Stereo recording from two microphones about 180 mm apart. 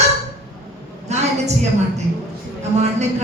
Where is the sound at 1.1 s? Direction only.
40° right (ahead or behind).